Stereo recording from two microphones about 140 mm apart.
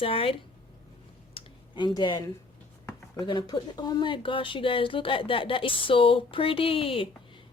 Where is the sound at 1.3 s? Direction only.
35° left (ahead or behind).